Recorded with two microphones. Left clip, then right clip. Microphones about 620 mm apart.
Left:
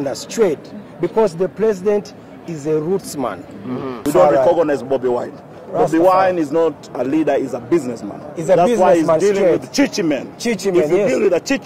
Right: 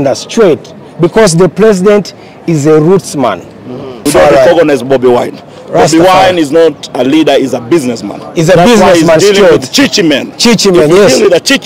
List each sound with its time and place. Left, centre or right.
0.0 s a man's voice: right
1.2 s a man's voice: right